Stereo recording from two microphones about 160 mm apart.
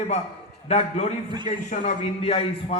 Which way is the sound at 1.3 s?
30° right (ahead or behind).